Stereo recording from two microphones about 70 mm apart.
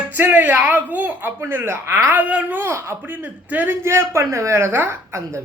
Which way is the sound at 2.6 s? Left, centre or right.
Right.